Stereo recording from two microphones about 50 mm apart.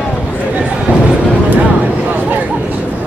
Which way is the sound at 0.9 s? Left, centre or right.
Right.